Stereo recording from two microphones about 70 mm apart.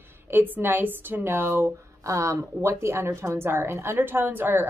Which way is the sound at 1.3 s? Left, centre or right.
Right.